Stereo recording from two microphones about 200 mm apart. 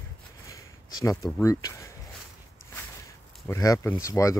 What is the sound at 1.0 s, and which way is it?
Speech, 15° left (ahead or behind).